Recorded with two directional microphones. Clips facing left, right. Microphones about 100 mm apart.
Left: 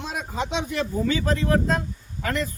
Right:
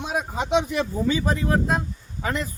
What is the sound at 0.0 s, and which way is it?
A man's voice, 15° right (ahead or behind).